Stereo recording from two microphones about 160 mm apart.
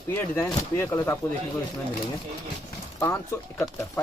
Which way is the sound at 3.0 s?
20° left (ahead or behind).